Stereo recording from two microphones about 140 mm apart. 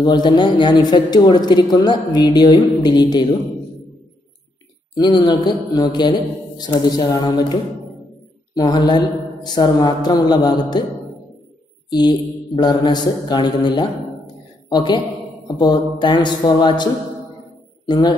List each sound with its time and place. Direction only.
0.0 s speech: 30° left (ahead or behind)
4.9 s speech: 30° left (ahead or behind)
8.5 s speech: 30° left (ahead or behind)
11.9 s a man's voice: 30° left (ahead or behind)